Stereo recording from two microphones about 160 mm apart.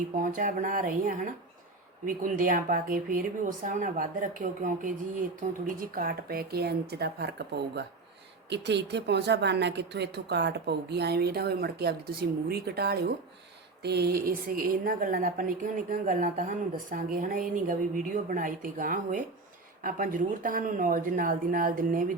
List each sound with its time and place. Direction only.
0.2 s a woman's voice: 55° right (ahead or behind)